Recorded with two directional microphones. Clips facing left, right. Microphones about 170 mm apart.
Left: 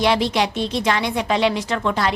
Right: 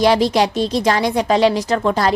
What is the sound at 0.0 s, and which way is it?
A woman's voice, 40° right (ahead or behind).